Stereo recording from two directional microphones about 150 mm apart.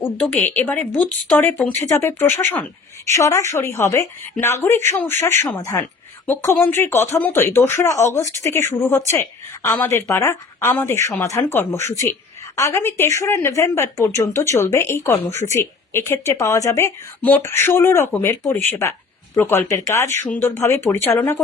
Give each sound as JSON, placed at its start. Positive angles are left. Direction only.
{"t": 0.0, "sound": "a woman's voice", "side_deg": 10}